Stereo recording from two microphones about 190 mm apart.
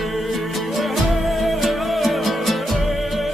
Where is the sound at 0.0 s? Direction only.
Centre (ahead or behind).